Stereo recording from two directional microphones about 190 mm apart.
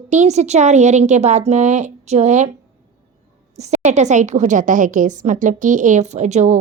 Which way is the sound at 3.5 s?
35° right (ahead or behind).